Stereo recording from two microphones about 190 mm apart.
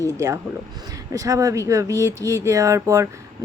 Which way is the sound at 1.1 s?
15° right (ahead or behind).